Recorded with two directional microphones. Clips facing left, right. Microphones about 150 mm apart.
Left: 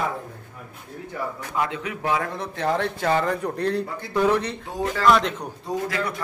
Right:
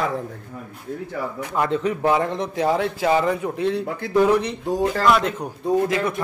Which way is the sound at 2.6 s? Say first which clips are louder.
Right 2 dB; 5° right (ahead or behind).